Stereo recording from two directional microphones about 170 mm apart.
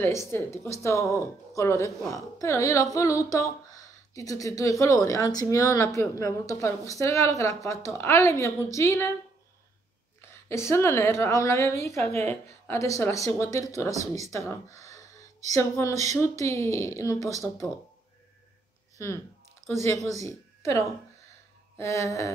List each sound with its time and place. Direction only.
0.0 s speech: 15° left (ahead or behind)
10.5 s speech: 15° left (ahead or behind)
19.6 s a sound: 20° right (ahead or behind)
20.2 s a woman's voice: 20° left (ahead or behind)